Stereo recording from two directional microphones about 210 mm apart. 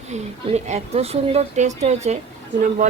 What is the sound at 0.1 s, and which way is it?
Speech, 30° right (ahead or behind).